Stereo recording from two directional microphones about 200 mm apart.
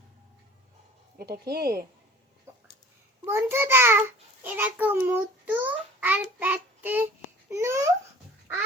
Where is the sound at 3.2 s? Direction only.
10° right (ahead or behind).